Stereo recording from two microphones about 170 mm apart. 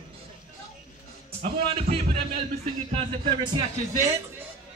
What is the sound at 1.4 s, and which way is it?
Speech, 35° right (ahead or behind).